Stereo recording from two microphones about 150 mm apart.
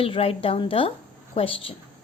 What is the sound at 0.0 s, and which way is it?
A woman's voice, 40° left (ahead or behind).